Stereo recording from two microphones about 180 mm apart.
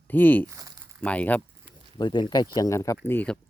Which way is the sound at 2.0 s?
25° left (ahead or behind).